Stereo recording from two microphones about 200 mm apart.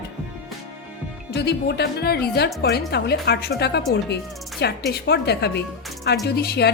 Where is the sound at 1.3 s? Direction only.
55° left (ahead or behind).